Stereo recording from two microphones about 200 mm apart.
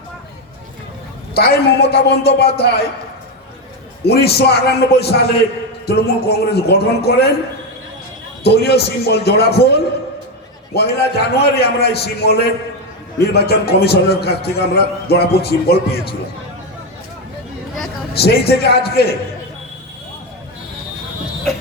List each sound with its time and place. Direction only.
1.3 s a man's voice: 55° left (ahead or behind)
4.0 s a man's voice: 55° left (ahead or behind)
8.4 s a man's voice: 55° left (ahead or behind)
18.1 s a man's voice: 55° left (ahead or behind)